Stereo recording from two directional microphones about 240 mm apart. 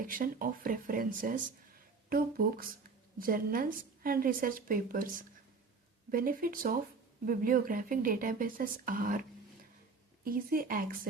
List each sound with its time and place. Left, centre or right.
0.0 s a woman's voice: right
10.2 s a woman's voice: right